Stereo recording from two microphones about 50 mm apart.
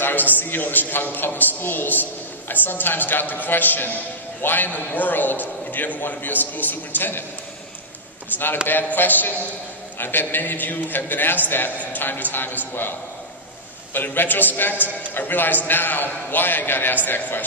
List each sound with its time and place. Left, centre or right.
0.0 s a sound: left
0.4 s a man's voice: left
8.8 s a man's voice: left
13.9 s a man's voice: left